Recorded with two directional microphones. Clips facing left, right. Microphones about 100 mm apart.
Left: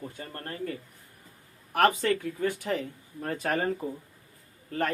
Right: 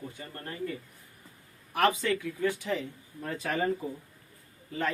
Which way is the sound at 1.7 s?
50° left (ahead or behind).